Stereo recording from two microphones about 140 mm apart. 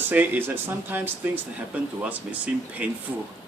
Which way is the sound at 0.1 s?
15° right (ahead or behind).